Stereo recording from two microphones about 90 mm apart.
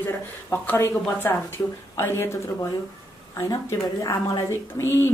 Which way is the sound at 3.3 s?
35° left (ahead or behind).